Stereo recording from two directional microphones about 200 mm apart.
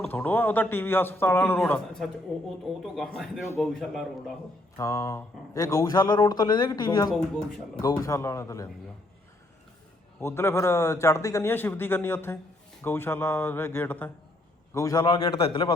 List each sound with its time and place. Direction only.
0.1 s a man's voice: 10° left (ahead or behind)
4.8 s a man's voice: 15° left (ahead or behind)
10.2 s a man's voice: 15° left (ahead or behind)